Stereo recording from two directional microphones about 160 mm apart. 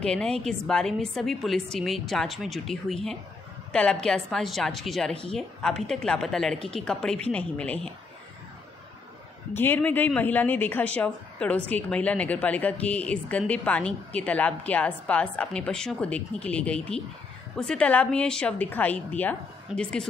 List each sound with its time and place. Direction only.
0.0 s a woman's voice: 5° left (ahead or behind)
9.5 s a woman's voice: 15° left (ahead or behind)